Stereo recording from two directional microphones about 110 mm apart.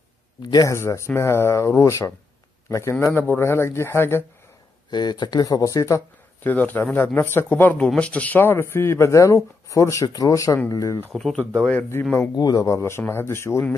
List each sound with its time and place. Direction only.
0.5 s speech: 30° left (ahead or behind)
4.9 s speech: 40° left (ahead or behind)
6.4 s speech: 15° left (ahead or behind)
11.1 s speech: 5° left (ahead or behind)
12.4 s speech: 35° left (ahead or behind)